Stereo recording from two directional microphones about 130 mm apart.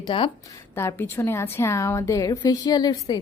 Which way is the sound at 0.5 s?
25° left (ahead or behind).